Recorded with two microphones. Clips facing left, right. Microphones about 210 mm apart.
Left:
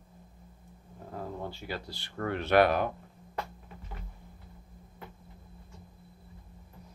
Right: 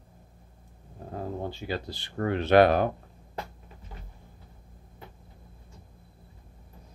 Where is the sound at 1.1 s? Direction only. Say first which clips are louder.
Right 4 dB; 30° right (ahead or behind).